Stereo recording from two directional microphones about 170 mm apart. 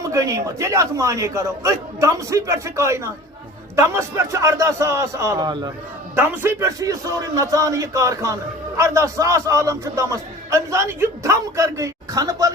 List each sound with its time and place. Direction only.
0.0 s a man's voice: 20° right (ahead or behind)